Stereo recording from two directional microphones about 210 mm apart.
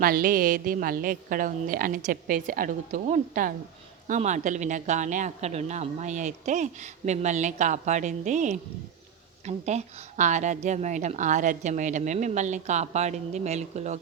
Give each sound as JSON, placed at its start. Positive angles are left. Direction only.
{"t": 0.0, "sound": "speech", "side_deg": -40}